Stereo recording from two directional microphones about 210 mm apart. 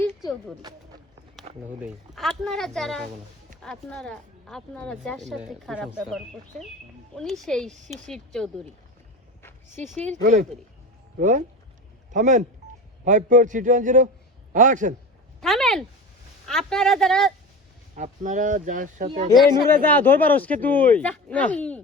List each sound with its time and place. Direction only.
1.5 s speech: 30° right (ahead or behind)
1.8 s speech: centre (ahead or behind)
9.4 s a sound: 10° left (ahead or behind)
10.1 s speech: 35° right (ahead or behind)
15.4 s a sound: centre (ahead or behind)
16.5 s speech: centre (ahead or behind)
17.9 s speech: 40° right (ahead or behind)
19.0 s speech: 25° right (ahead or behind)
19.3 s speech: 5° left (ahead or behind)